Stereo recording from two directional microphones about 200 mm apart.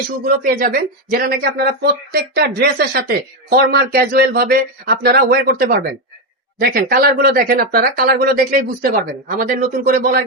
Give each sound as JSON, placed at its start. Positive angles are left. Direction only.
{"t": 0.4, "sound": "speech", "side_deg": -45}